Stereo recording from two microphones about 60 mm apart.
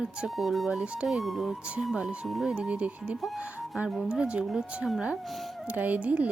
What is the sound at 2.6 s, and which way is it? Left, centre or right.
Speech, centre.